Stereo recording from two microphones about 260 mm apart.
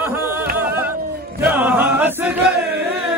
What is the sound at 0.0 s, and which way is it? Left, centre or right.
Music, centre.